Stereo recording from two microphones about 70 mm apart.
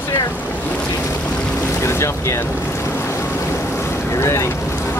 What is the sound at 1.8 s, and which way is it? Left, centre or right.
Boat, left.